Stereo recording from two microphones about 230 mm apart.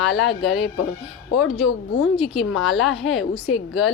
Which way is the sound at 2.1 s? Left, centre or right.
Centre.